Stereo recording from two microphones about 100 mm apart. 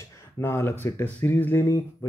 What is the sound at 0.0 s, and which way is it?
Speech, 30° left (ahead or behind).